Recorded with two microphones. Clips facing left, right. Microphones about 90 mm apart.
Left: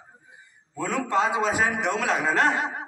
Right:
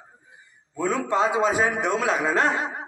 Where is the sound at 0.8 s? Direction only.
20° right (ahead or behind).